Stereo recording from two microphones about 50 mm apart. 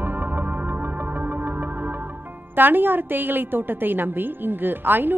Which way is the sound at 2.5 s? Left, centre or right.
Right.